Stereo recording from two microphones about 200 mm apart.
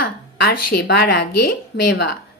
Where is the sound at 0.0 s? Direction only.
50° left (ahead or behind).